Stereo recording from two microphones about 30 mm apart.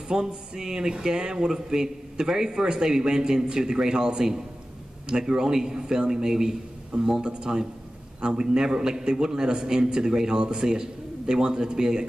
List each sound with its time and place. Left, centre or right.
0.1 s speech: right
6.9 s a man's voice: right